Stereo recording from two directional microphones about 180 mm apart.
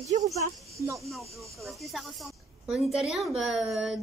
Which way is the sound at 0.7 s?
15° right (ahead or behind).